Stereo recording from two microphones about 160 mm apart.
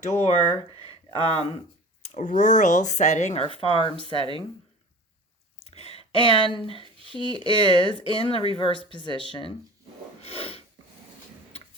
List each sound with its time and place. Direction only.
0.2 s speech: 45° left (ahead or behind)
0.5 s speech: 25° right (ahead or behind)
1.2 s speech: 35° left (ahead or behind)
2.0 s speech: 50° left (ahead or behind); by 4.4 s 35° left (ahead or behind)
5.5 s a sound: 40° left (ahead or behind)
6.8 s a sound: 30° right (ahead or behind)
7.3 s speech: 30° left (ahead or behind)
9.1 s speech: 35° right (ahead or behind)
10.2 s a sound: 40° left (ahead or behind)